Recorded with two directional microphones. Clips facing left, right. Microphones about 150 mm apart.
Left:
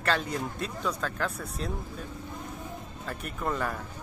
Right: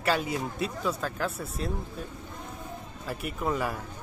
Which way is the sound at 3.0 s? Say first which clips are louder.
Right 2 dB; 5° right (ahead or behind).